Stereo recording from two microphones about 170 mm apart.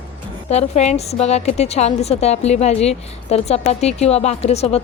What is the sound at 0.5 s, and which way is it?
Speech, 40° left (ahead or behind).